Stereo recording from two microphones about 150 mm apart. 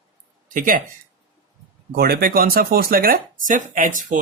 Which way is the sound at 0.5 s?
70° right (ahead or behind).